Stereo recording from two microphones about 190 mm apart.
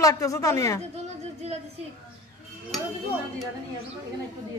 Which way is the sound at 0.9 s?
35° right (ahead or behind).